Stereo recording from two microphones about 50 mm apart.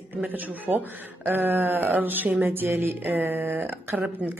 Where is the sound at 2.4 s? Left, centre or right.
Right.